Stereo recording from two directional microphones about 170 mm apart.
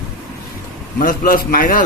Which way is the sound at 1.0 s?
55° left (ahead or behind).